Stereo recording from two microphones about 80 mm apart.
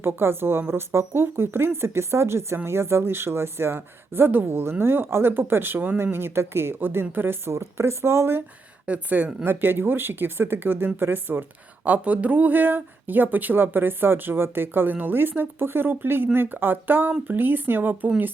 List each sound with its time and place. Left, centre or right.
0.0 s speech: right
8.9 s speech: centre